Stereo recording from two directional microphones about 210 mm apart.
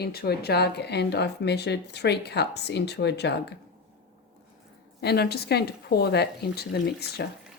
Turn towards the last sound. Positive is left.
turn(degrees=50)  # may be behind; listen again after turning